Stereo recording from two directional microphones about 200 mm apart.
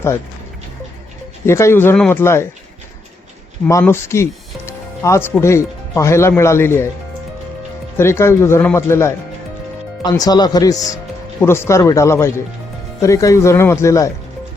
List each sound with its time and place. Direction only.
1.5 s speech: 15° left (ahead or behind)
3.7 s speech: 15° left (ahead or behind)
7.9 s speech: 10° left (ahead or behind)